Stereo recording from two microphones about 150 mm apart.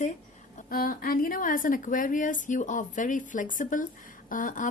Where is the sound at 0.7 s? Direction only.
75° left (ahead or behind).